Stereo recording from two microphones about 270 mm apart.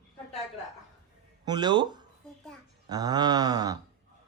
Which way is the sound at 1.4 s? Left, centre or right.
Centre.